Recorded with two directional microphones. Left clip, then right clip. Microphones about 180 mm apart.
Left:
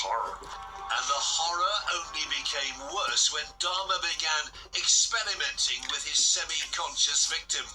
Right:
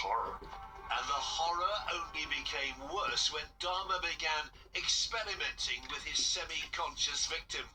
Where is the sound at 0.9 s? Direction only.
25° left (ahead or behind).